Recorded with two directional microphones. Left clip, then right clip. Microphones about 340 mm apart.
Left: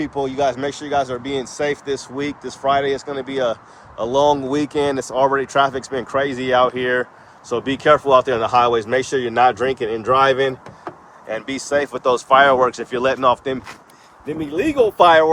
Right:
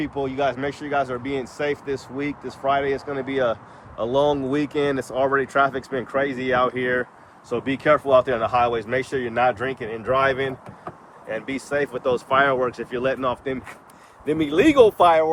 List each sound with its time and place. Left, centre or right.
0.0 s speech: centre
14.3 s speech: centre
14.9 s speech: left